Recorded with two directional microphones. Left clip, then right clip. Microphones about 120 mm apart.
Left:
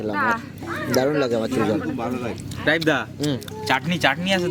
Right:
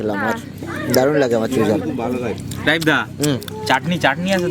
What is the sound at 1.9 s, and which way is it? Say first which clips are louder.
Speech: right 5 dB; 15° left (ahead or behind).